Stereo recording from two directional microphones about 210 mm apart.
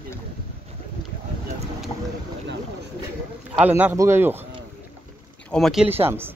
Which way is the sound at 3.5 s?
10° right (ahead or behind).